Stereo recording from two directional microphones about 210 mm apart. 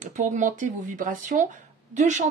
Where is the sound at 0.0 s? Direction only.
35° right (ahead or behind).